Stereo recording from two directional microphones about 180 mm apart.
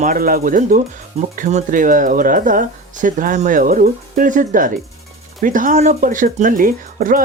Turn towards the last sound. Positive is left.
turn(degrees=-50)  # may be behind; listen again after turning